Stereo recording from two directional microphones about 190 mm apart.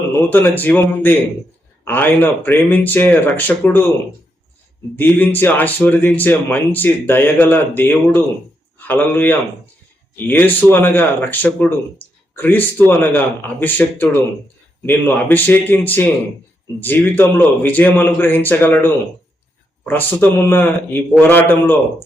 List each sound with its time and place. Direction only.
0.3 s speech: 10° left (ahead or behind)
4.9 s speech: 10° left (ahead or behind)